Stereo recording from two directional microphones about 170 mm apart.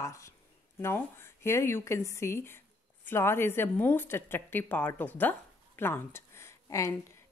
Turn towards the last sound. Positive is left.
turn(degrees=20)  # may be behind; listen again after turning